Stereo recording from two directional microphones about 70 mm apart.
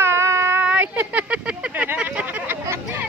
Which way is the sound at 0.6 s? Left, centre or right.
Right.